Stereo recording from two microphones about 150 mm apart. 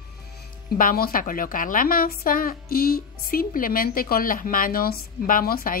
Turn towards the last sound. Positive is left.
turn(degrees=75)  # may be behind; listen again after turning